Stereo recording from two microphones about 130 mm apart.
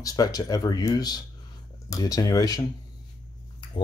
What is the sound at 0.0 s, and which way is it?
Speech, 30° left (ahead or behind).